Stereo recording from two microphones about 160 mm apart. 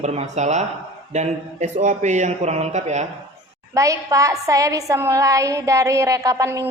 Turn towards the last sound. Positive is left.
turn(degrees=-20)  # may be behind; listen again after turning